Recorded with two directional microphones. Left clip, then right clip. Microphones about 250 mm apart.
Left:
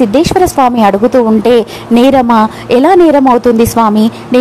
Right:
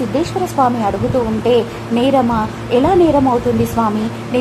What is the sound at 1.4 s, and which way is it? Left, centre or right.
A woman's voice, left.